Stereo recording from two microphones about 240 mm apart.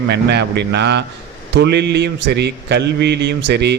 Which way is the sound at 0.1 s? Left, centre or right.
Right.